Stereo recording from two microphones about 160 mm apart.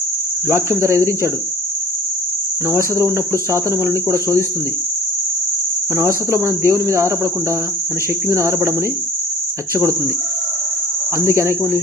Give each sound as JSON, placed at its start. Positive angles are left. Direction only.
{"t": 0.4, "sound": "cricket", "side_deg": -15}
{"t": 2.6, "sound": "cricket", "side_deg": -20}
{"t": 6.0, "sound": "cricket", "side_deg": -20}
{"t": 8.3, "sound": "cricket", "side_deg": -20}
{"t": 11.3, "sound": "cricket", "side_deg": -20}